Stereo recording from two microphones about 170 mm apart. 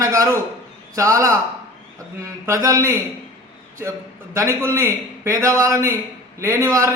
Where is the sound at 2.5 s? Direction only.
15° right (ahead or behind).